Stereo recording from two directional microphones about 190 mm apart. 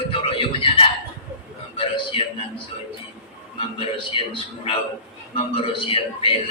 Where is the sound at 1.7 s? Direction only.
25° left (ahead or behind).